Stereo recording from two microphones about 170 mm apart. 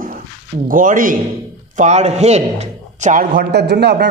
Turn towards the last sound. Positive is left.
turn(degrees=-80)